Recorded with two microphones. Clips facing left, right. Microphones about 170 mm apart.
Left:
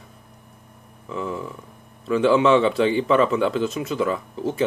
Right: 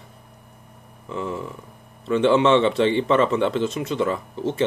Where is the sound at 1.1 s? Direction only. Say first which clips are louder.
Even; 30° right (ahead or behind).